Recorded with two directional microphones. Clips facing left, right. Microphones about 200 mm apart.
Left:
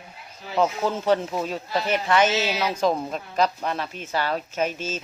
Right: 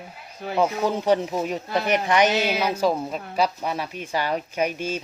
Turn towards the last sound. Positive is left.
turn(degrees=-15)  # may be behind; listen again after turning